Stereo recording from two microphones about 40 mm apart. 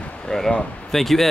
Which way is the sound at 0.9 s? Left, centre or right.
Centre.